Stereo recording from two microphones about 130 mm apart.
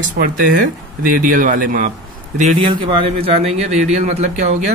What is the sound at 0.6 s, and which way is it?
Speech, 90° right.